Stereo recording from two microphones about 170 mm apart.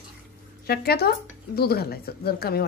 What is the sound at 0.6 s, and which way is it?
A woman's voice, 65° left (ahead or behind).